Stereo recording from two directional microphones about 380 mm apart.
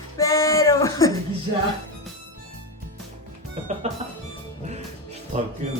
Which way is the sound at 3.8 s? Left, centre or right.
Centre.